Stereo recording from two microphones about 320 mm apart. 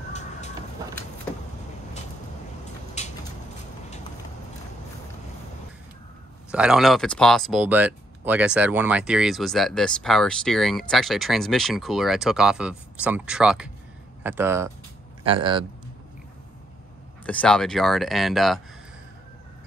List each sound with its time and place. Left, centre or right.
3.0 s a sound: left
6.5 s speech: centre
17.3 s speech: centre